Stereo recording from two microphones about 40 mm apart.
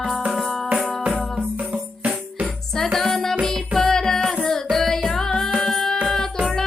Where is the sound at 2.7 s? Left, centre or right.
Centre.